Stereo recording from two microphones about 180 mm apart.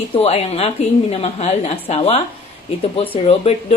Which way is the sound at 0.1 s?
35° left (ahead or behind).